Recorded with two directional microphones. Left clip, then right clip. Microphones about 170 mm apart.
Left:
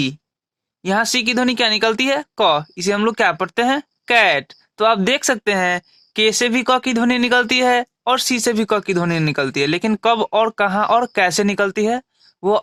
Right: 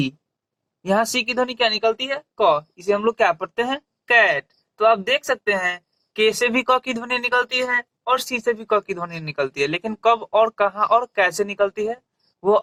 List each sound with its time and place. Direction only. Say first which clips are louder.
0.8 s speech: left 2 dB; 30° left (ahead or behind)